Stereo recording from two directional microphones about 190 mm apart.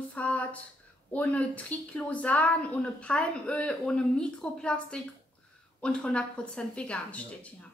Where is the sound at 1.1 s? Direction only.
5° left (ahead or behind).